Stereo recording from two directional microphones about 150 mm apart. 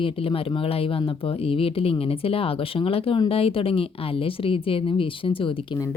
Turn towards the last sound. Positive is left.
turn(degrees=35)  # may be behind; listen again after turning